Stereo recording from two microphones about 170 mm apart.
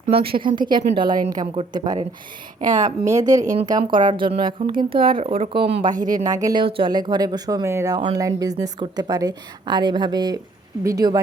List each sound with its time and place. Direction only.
0.2 s speech: 30° right (ahead or behind)